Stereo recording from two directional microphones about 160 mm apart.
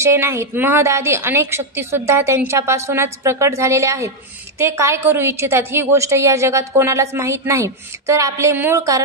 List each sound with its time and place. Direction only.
0.0 s a woman's voice: 15° right (ahead or behind)